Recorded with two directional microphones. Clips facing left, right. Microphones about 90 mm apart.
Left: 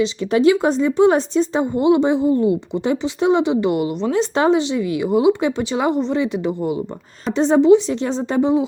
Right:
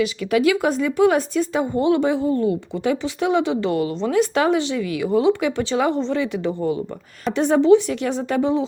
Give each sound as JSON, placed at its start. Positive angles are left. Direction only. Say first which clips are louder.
{"t": 0.0, "sound": "speech", "louder": "left 3 dB", "side_deg": 30}